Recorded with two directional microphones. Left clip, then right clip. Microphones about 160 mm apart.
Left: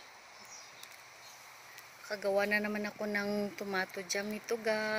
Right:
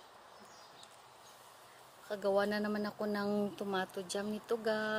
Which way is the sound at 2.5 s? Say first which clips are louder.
Left 4 dB; 5° right (ahead or behind).